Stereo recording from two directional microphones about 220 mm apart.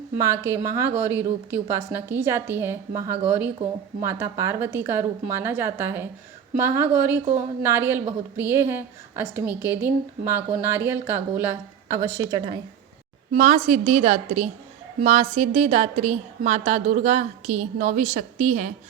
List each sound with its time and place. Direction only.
0.2 s a woman's voice: 10° right (ahead or behind)
13.3 s a woman's voice: 35° right (ahead or behind)